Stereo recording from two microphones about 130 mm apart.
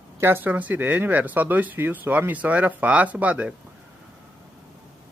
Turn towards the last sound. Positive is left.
turn(degrees=-10)  # may be behind; listen again after turning